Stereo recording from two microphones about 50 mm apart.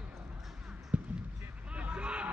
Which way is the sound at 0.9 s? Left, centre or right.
Right.